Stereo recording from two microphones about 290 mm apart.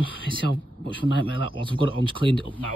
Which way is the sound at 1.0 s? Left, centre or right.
Left.